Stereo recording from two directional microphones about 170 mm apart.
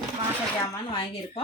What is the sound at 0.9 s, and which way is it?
Speech, 30° left (ahead or behind).